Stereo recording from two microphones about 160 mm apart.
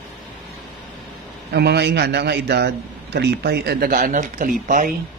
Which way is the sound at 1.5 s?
90° right.